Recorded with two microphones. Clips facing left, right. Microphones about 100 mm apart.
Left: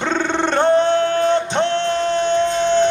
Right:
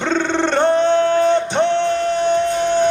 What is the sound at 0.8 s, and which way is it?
Music, 20° right (ahead or behind).